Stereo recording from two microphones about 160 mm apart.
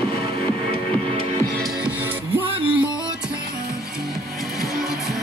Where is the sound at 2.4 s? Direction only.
35° right (ahead or behind).